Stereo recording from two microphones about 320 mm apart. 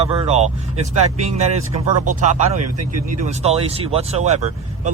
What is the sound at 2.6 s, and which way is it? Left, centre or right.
Speech, right.